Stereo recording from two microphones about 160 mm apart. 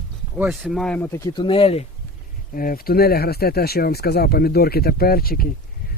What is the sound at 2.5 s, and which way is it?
Speech, 60° left (ahead or behind).